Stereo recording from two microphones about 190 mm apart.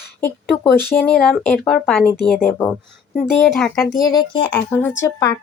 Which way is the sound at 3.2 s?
5° left (ahead or behind).